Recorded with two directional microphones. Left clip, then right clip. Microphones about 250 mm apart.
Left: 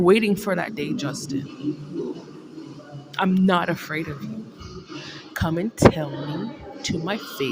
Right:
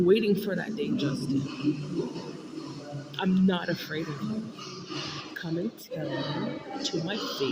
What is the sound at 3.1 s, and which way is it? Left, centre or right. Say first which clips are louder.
Speech: left 8 dB; left.